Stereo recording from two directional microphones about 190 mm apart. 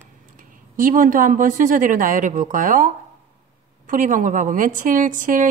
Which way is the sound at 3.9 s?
45° right (ahead or behind).